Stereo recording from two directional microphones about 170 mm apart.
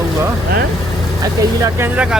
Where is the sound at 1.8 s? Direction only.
5° right (ahead or behind).